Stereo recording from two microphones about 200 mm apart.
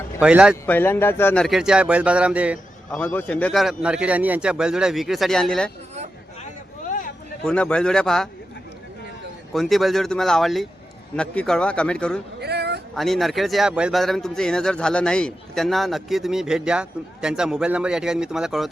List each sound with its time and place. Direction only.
0.2 s a man's voice: 5° right (ahead or behind)
0.6 s a man's voice: 10° left (ahead or behind); by 3.0 s 5° right (ahead or behind)
3.0 s a man's voice: 10° left (ahead or behind)
7.4 s a man's voice: 5° left (ahead or behind)
9.5 s a man's voice: centre (ahead or behind)
12.4 s a sound: 55° right (ahead or behind)
13.0 s a man's voice: centre (ahead or behind)